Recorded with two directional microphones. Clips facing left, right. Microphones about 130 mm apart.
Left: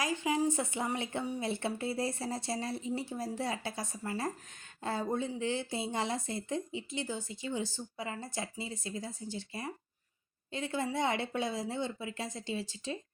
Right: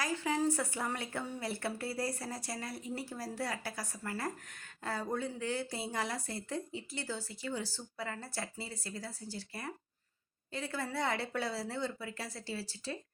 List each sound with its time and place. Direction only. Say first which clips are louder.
0.0 s speech: left 2 dB; 20° left (ahead or behind)